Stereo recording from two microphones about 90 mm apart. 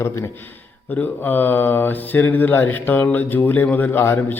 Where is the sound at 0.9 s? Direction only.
20° left (ahead or behind).